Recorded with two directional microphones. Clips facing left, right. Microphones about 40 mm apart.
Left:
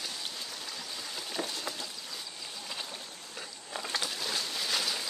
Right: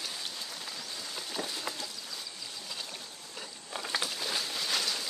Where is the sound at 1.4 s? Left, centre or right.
Centre.